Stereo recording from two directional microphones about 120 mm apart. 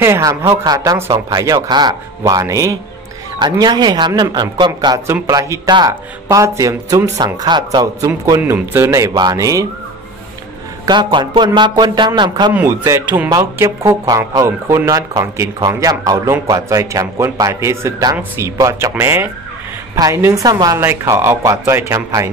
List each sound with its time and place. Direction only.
0.0 s speech: 25° right (ahead or behind)
1.3 s a man's voice: 30° right (ahead or behind)
3.3 s a man's voice: 40° right (ahead or behind)
5.0 s a man's voice: 20° right (ahead or behind)
8.4 s speech: 20° right (ahead or behind)
10.9 s a man's voice: 40° right (ahead or behind)
12.6 s speech: 25° right (ahead or behind)